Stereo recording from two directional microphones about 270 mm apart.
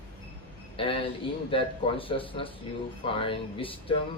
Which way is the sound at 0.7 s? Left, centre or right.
Centre.